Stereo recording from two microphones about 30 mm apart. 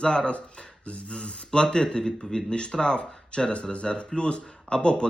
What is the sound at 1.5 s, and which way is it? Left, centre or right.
Speech, left.